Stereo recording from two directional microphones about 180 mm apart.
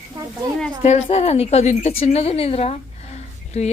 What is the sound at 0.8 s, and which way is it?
A woman's voice, 35° left (ahead or behind).